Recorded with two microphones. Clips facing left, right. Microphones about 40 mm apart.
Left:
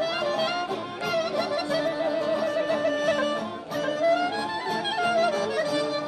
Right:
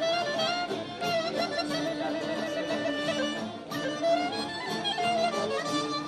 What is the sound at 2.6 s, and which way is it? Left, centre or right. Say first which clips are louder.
Music: left 5 dB; left.